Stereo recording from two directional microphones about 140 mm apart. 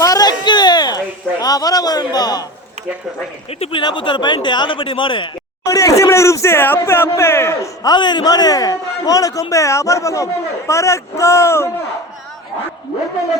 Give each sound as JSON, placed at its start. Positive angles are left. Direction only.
{"t": 0.0, "sound": "a sound", "side_deg": 25}
{"t": 3.6, "sound": "speech", "side_deg": 40}
{"t": 5.6, "sound": "speech", "side_deg": 25}
{"t": 7.9, "sound": "speech", "side_deg": 30}